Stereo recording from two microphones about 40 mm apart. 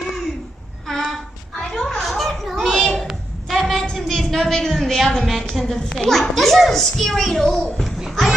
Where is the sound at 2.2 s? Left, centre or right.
Centre.